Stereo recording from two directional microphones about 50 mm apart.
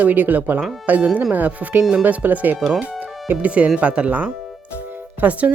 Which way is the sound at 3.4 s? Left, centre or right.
Right.